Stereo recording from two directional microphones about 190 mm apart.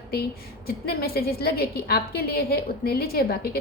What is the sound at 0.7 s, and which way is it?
A woman's voice, 55° left (ahead or behind).